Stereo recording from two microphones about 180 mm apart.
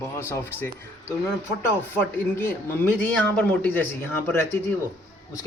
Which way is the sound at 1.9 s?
10° left (ahead or behind).